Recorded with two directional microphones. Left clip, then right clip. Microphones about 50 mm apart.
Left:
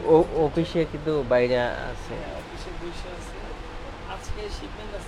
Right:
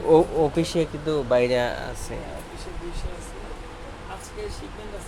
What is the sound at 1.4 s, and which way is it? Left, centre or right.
Speech, right.